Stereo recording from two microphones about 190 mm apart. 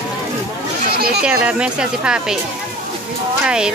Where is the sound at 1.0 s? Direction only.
55° right (ahead or behind).